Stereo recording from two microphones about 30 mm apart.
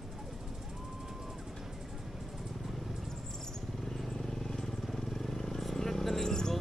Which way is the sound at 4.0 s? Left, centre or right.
Centre.